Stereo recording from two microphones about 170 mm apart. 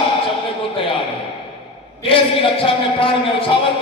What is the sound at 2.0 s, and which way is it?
A man's voice, 30° left (ahead or behind).